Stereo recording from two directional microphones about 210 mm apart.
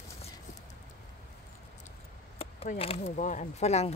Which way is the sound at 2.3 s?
30° left (ahead or behind).